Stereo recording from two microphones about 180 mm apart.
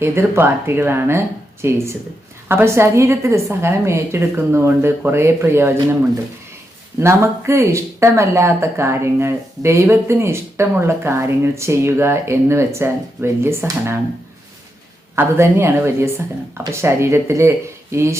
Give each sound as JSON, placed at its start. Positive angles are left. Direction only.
{"t": 0.0, "sound": "speech", "side_deg": -15}
{"t": 15.1, "sound": "speech", "side_deg": -15}